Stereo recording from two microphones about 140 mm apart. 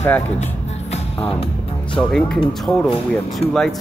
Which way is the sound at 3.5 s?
5° left (ahead or behind).